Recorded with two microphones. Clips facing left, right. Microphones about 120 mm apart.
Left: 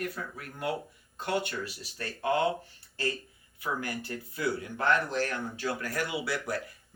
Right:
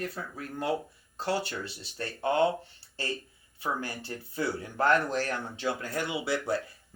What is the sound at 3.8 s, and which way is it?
Speech, 25° right (ahead or behind).